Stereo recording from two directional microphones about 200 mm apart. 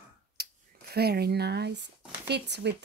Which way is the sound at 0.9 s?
50° right (ahead or behind).